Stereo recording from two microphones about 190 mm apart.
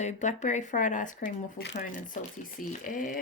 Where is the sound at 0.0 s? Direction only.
40° left (ahead or behind).